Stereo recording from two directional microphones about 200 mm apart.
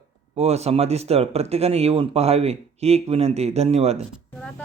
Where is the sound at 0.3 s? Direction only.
30° right (ahead or behind).